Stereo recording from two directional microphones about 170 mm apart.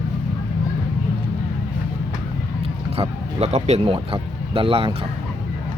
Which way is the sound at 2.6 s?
35° right (ahead or behind).